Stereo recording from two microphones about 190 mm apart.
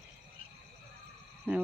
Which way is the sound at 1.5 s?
10° right (ahead or behind).